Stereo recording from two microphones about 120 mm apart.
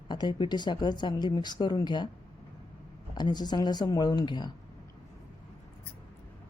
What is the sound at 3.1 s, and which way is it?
Speech, 35° left (ahead or behind).